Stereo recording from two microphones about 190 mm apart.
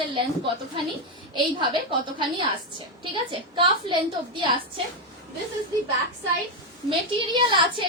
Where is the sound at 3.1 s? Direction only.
25° right (ahead or behind).